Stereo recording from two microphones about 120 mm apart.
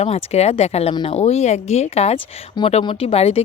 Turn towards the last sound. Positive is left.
turn(degrees=55)  # may be behind; listen again after turning